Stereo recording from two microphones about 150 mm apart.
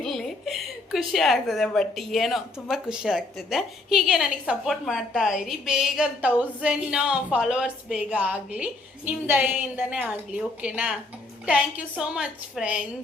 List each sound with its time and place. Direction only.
0.0 s a woman's voice: centre (ahead or behind)